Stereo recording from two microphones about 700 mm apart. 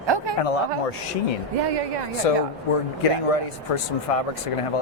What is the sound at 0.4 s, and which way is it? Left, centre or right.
Speech, left.